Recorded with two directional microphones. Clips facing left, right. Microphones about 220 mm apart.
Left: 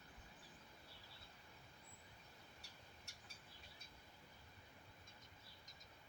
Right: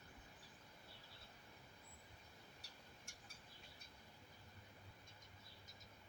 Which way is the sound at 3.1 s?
50° right (ahead or behind).